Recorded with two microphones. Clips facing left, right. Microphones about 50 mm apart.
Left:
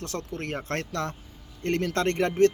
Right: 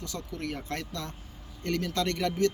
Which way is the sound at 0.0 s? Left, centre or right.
Left.